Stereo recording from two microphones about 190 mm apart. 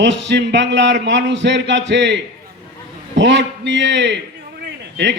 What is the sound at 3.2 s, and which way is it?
A man's voice, 70° right (ahead or behind).